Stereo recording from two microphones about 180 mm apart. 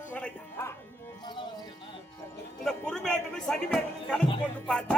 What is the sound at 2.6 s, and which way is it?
Music, centre (ahead or behind).